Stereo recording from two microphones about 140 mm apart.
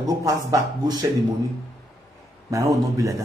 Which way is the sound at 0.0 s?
25° right (ahead or behind).